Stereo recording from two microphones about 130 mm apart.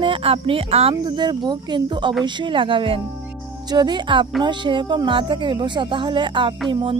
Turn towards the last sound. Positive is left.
turn(degrees=-40)  # may be behind; listen again after turning